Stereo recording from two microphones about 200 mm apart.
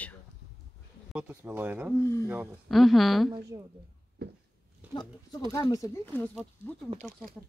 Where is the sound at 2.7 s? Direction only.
Centre (ahead or behind).